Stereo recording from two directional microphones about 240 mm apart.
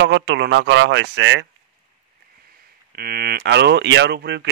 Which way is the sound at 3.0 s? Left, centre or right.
Right.